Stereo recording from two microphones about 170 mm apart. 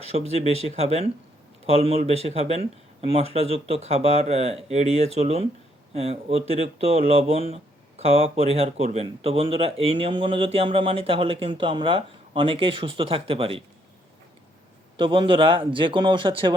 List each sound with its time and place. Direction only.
0.1 s speech: 40° right (ahead or behind)
14.9 s speech: 30° right (ahead or behind)